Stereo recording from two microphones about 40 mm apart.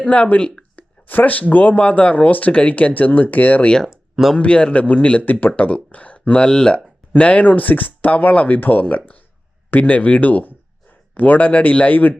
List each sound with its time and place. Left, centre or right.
0.0 s speech: left
0.8 s speech: left
3.8 s a sound: centre
4.4 s speech: left
5.2 s speech: left
5.5 s speech: left
7.2 s speech: left
7.4 s speech: left